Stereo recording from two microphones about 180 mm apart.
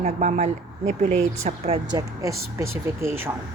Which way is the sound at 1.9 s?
20° right (ahead or behind).